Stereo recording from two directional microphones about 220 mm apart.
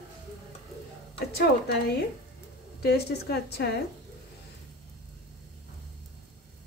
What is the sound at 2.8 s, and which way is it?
Speech, 45° left (ahead or behind).